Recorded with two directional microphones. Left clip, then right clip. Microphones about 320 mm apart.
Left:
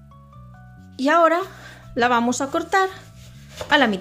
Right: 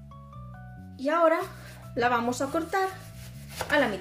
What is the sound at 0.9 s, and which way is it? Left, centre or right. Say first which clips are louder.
Speech: left 7 dB; left.